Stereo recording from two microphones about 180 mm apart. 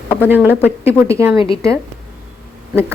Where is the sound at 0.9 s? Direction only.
15° right (ahead or behind).